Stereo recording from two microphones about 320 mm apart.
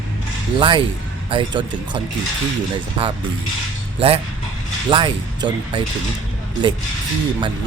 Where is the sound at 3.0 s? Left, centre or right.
Centre.